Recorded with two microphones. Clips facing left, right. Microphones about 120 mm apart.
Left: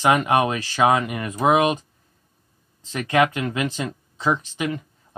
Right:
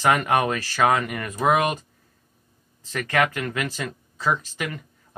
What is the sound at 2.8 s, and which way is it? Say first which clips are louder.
Speech: left 3 dB; 15° left (ahead or behind).